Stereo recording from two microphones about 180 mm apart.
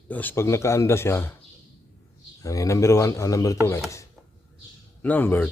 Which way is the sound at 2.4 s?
20° left (ahead or behind).